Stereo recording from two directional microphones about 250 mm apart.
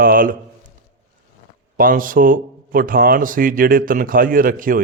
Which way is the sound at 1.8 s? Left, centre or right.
Right.